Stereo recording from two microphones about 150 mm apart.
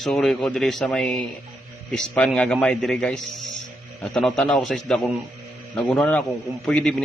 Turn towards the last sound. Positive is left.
turn(degrees=5)  # may be behind; listen again after turning